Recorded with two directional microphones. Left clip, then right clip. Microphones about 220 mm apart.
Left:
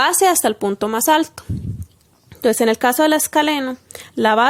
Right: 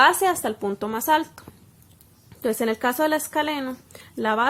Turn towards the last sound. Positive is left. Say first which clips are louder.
# left 8 dB
turn(degrees=40)  # may be behind; listen again after turning